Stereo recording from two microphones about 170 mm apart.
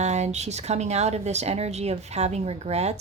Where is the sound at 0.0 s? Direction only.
40° right (ahead or behind).